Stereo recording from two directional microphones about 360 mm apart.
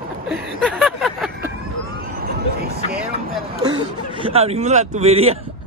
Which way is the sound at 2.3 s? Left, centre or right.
Right.